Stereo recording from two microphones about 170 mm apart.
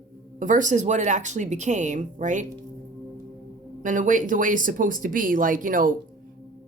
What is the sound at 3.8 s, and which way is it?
A woman's voice, 50° right (ahead or behind).